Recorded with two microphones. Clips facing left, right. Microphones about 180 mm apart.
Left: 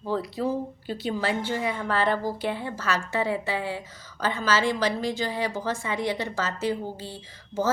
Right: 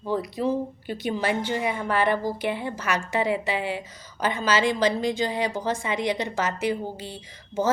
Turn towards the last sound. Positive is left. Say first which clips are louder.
# right 1 dB
turn(degrees=-15)  # may be behind; listen again after turning